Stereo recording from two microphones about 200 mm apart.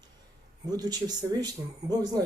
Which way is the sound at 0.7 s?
20° right (ahead or behind).